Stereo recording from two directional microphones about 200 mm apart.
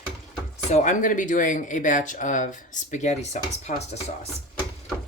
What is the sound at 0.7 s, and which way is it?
Speech, 40° left (ahead or behind).